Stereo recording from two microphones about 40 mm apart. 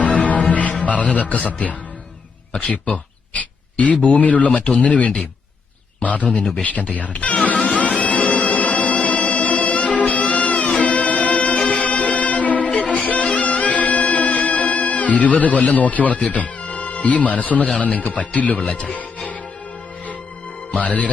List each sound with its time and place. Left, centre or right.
0.2 s music: left
2.5 s speech: left
3.3 s speech: left
7.5 s music: left
15.8 s speech: left
16.6 s music: left
17.7 s speech: left
20.7 s speech: left